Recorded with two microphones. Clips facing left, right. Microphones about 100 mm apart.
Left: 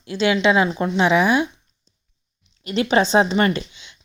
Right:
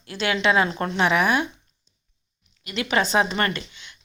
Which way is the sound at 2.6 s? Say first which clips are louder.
Left 5 dB; 30° left (ahead or behind).